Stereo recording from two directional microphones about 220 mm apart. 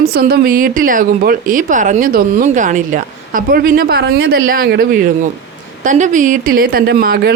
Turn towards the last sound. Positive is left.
turn(degrees=-45)  # may be behind; listen again after turning